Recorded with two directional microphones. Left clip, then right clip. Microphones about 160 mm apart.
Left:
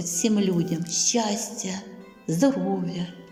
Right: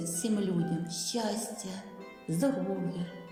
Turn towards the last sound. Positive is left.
turn(degrees=15)  # may be behind; listen again after turning